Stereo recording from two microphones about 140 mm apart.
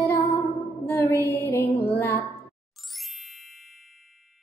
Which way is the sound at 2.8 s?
Centre (ahead or behind).